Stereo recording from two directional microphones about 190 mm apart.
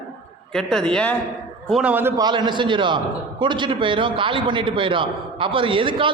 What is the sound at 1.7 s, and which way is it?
A man's voice, 5° right (ahead or behind).